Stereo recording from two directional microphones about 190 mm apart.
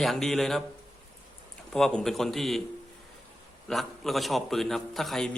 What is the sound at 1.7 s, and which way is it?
Speech, 5° left (ahead or behind).